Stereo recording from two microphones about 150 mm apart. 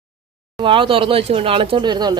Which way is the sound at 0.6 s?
35° right (ahead or behind).